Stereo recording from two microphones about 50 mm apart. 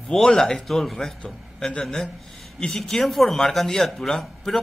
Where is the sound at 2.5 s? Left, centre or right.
Centre.